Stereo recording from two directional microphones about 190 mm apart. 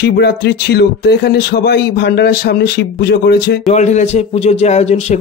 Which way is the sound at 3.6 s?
40° left (ahead or behind).